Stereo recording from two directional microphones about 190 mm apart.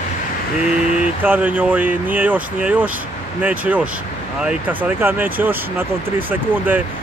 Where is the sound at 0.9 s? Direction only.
10° right (ahead or behind).